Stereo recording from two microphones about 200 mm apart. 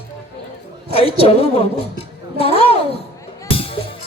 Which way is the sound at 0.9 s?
30° left (ahead or behind).